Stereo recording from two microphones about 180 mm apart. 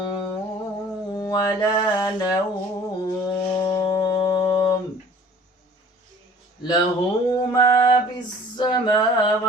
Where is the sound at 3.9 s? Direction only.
25° left (ahead or behind).